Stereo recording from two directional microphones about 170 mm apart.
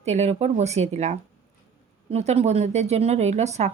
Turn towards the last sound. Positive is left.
turn(degrees=-40)  # may be behind; listen again after turning